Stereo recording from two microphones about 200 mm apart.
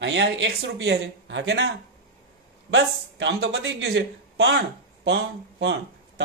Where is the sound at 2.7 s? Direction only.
65° right (ahead or behind).